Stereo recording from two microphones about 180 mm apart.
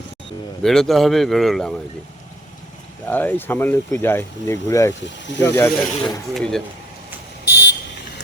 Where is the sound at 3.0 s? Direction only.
10° left (ahead or behind).